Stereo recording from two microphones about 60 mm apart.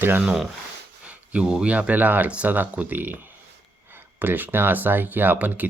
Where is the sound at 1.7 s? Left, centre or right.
Right.